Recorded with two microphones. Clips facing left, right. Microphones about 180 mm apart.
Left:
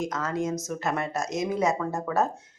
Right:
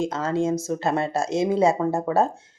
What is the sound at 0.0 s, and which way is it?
A woman's voice, 30° right (ahead or behind).